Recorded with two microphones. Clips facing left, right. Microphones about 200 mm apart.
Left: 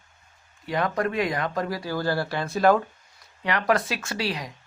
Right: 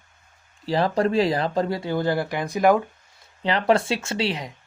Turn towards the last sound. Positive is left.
turn(degrees=-25)  # may be behind; listen again after turning